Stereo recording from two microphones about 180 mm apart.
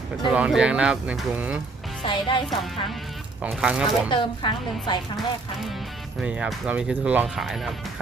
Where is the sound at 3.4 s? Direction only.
5° right (ahead or behind).